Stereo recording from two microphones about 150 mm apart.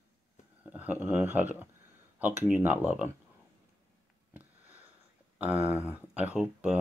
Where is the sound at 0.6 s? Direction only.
10° right (ahead or behind).